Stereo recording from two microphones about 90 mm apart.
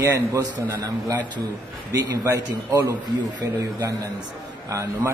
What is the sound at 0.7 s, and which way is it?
A man's voice, 40° right (ahead or behind).